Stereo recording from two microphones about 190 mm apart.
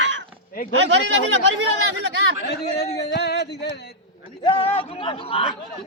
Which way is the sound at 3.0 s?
60° left (ahead or behind).